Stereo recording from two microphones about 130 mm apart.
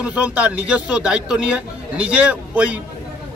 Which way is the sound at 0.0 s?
10° right (ahead or behind).